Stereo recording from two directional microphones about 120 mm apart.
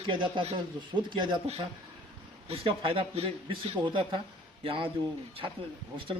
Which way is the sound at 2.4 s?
50° right (ahead or behind).